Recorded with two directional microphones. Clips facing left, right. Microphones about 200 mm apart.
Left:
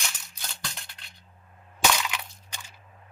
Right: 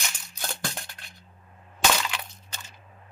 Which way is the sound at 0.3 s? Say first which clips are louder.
Right 7 dB; 50° right (ahead or behind).